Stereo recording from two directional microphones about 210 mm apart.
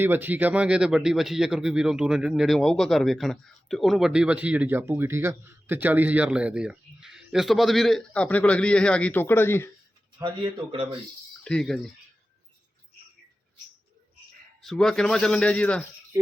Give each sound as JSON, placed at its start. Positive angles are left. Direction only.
{"t": 0.0, "sound": "speech", "side_deg": -10}
{"t": 10.2, "sound": "speech", "side_deg": -25}
{"t": 11.4, "sound": "speech", "side_deg": 5}
{"t": 14.6, "sound": "speech", "side_deg": 0}